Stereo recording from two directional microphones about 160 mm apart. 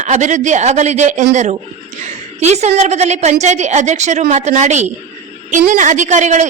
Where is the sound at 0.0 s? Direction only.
50° right (ahead or behind).